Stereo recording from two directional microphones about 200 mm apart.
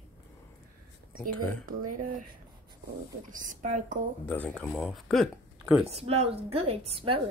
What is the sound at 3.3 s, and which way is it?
Speech, 40° right (ahead or behind).